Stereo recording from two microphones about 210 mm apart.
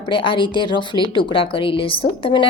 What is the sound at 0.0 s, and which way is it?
A woman's voice, 25° left (ahead or behind).